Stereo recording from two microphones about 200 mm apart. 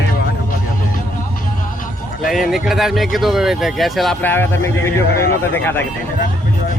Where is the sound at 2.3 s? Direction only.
Centre (ahead or behind).